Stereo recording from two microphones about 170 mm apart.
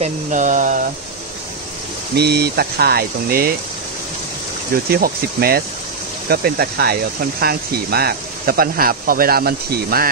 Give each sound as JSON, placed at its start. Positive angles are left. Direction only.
{"t": 0.0, "sound": "speech", "side_deg": -45}
{"t": 2.1, "sound": "speech", "side_deg": -70}
{"t": 4.9, "sound": "speech", "side_deg": -60}